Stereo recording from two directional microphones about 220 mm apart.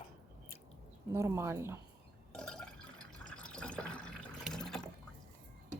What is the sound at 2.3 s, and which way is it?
Fill, 5° left (ahead or behind).